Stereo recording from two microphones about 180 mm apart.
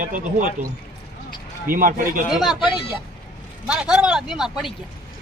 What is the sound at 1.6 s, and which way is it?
Speech, 50° right (ahead or behind).